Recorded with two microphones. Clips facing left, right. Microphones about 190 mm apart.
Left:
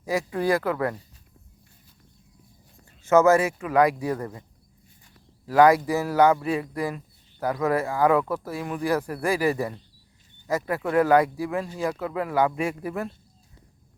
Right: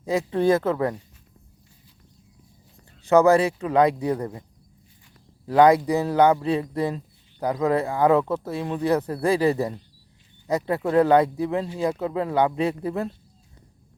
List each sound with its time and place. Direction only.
0.0 s speech: 20° right (ahead or behind)
3.0 s speech: 15° right (ahead or behind)
3.3 s speech: 30° right (ahead or behind)
5.5 s speech: 20° right (ahead or behind)